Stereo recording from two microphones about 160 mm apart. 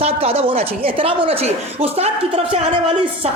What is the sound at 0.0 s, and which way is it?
A woman's voice, 40° right (ahead or behind).